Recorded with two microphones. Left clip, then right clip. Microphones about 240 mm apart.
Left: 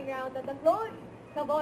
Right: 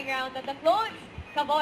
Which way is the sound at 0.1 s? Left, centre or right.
Centre.